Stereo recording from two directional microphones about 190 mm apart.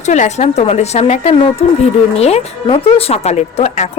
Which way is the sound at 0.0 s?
40° left (ahead or behind).